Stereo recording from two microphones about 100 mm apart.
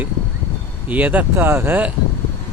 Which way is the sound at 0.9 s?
15° right (ahead or behind).